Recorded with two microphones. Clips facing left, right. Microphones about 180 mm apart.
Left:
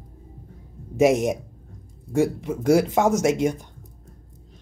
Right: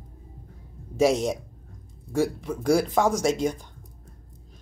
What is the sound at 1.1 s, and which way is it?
Speech, 20° left (ahead or behind).